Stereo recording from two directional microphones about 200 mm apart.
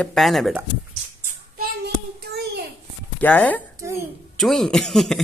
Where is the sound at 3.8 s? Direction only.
15° right (ahead or behind).